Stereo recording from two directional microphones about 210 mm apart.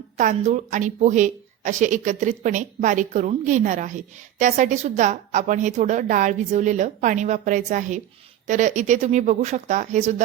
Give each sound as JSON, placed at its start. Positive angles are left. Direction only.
{"t": 0.2, "sound": "a woman's voice", "side_deg": -35}